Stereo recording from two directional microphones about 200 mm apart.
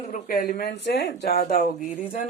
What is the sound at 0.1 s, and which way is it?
Speech, 45° left (ahead or behind).